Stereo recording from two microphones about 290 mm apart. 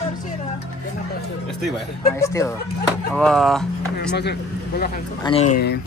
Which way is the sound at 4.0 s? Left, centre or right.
Left.